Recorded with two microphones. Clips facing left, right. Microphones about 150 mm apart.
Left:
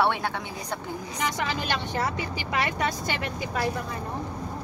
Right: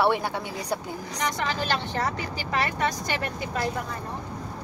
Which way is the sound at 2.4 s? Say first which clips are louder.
Right 1 dB; 40° right (ahead or behind).